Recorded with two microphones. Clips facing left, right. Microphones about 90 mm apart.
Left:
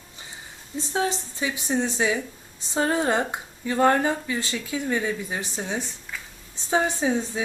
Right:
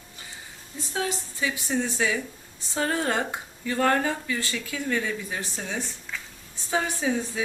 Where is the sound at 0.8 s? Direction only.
25° left (ahead or behind).